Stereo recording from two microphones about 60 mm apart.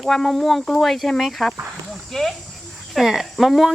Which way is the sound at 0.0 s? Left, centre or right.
Centre.